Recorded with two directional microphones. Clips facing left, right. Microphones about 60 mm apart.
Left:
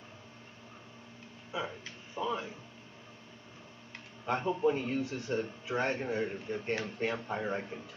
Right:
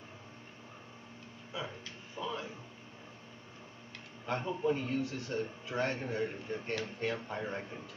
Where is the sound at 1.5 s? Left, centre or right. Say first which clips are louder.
Left 4 dB; centre.